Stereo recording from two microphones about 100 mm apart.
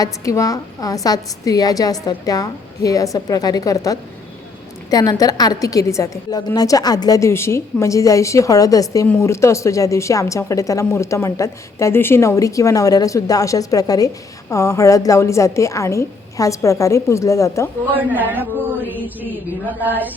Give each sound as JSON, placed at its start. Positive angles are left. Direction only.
{"t": 0.0, "sound": "a woman's voice", "side_deg": 35}
{"t": 17.9, "sound": "mantra", "side_deg": -20}